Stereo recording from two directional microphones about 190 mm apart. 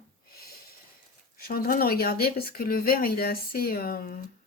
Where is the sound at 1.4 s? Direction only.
50° left (ahead or behind).